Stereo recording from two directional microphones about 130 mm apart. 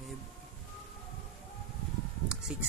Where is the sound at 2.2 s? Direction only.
5° right (ahead or behind).